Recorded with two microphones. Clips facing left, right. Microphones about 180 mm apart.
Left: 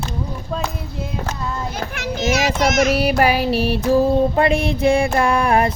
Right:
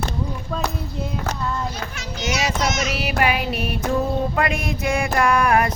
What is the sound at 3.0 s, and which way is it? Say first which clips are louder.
Music: left 5 dB; 40° left (ahead or behind).